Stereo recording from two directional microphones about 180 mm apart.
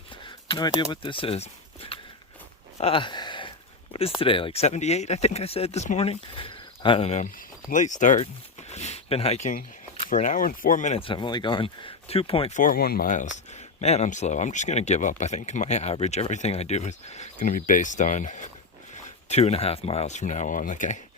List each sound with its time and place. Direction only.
0.3 s speech: 25° left (ahead or behind)
2.7 s a sound: 30° left (ahead or behind)
4.2 s speech: 30° left (ahead or behind)
12.5 s speech: 50° left (ahead or behind)